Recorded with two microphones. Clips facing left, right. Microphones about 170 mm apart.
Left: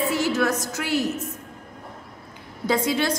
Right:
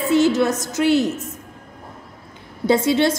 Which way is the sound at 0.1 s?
25° right (ahead or behind).